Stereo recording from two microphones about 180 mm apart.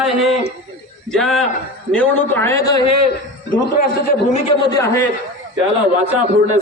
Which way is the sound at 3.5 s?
50° left (ahead or behind).